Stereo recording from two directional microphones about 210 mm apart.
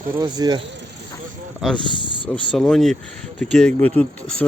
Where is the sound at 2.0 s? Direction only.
25° left (ahead or behind).